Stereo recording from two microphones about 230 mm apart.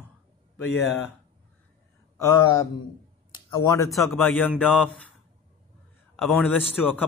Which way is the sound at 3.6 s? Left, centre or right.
Centre.